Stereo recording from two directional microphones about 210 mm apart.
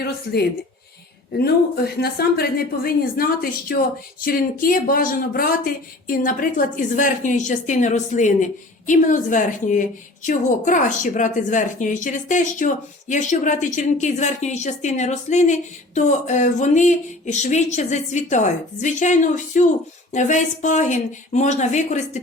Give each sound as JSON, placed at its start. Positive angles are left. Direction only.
{"t": 1.3, "sound": "a woman's voice", "side_deg": 50}